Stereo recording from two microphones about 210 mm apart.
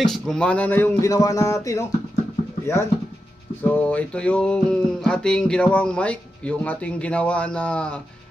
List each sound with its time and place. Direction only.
0.0 s speech: centre (ahead or behind)
3.6 s music: 5° left (ahead or behind)